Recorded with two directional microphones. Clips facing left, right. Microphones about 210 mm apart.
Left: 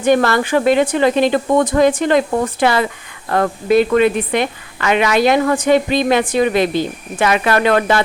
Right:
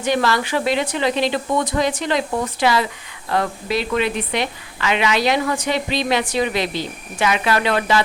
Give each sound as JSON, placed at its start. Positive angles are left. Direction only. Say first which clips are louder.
{"t": 0.0, "sound": "speech", "louder": "left 6 dB", "side_deg": 50}